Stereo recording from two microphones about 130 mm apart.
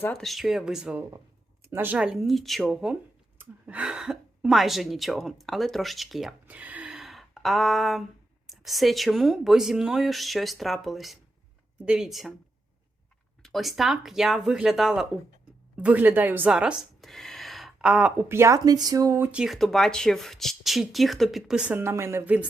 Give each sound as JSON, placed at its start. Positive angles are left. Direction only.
{"t": 0.1, "sound": "speech", "side_deg": 0}
{"t": 1.6, "sound": "speech", "side_deg": -15}
{"t": 2.0, "sound": "speech", "side_deg": -5}
{"t": 13.4, "sound": "speech", "side_deg": 0}
{"t": 19.3, "sound": "speech", "side_deg": -5}